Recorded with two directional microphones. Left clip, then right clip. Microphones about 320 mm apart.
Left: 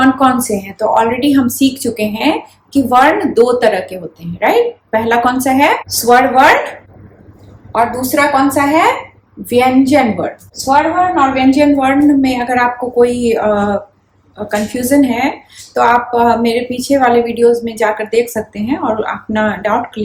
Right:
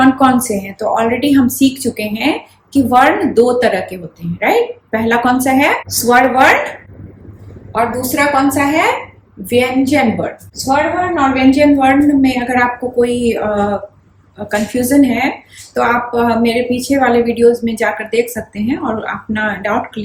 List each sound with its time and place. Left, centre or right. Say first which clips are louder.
0.0 s a woman's voice: even; centre